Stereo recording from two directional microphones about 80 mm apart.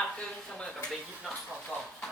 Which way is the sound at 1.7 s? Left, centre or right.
Centre.